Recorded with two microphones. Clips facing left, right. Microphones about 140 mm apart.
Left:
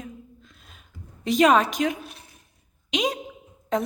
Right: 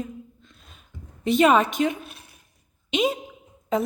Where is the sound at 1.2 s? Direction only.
Centre (ahead or behind).